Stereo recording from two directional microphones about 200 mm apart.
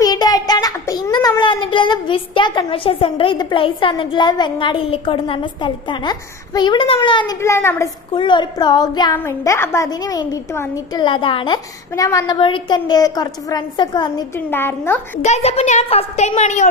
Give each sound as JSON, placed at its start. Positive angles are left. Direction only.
{"t": 0.0, "sound": "a child's voice", "side_deg": 20}
{"t": 14.5, "sound": "a woman's voice", "side_deg": 10}
{"t": 15.2, "sound": "a woman's voice", "side_deg": 35}